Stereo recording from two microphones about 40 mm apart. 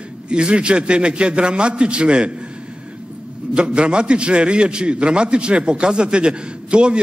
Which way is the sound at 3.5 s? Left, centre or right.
Right.